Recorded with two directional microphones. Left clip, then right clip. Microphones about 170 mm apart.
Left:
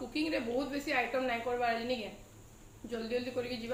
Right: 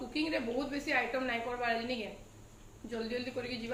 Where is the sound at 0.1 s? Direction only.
10° left (ahead or behind).